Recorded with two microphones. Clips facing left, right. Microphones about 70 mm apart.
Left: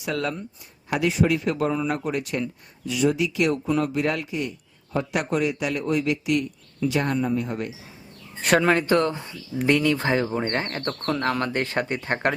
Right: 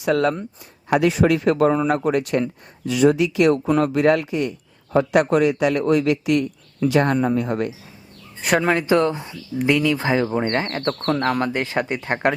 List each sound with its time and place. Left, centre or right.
0.0 s a man's voice: right
1.1 s a man's voice: right
8.4 s speech: centre
9.6 s speech: centre; by 11.2 s right
11.2 s speech: centre